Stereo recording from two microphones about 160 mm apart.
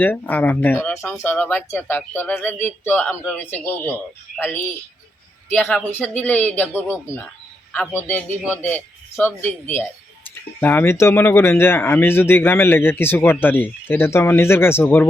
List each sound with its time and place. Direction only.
0.0 s speech: 10° left (ahead or behind)